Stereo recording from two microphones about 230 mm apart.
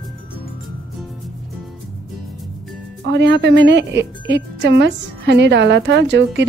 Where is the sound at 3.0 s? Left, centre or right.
Right.